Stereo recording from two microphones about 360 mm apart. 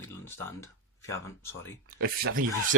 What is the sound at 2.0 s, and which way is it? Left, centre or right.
Speech, right.